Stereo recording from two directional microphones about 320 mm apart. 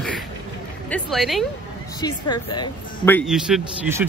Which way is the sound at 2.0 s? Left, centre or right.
Centre.